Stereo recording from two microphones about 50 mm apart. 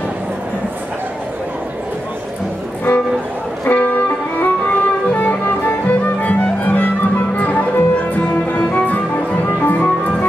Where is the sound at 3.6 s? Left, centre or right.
Left.